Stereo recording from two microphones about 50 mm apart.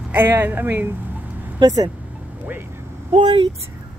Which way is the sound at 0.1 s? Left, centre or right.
Right.